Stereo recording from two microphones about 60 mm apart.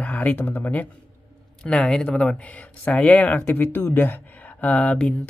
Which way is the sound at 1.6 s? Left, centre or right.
Centre.